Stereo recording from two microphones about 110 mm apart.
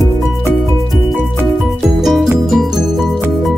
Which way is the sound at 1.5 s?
Centre (ahead or behind).